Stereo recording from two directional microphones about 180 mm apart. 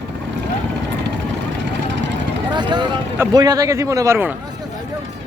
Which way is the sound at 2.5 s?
25° right (ahead or behind).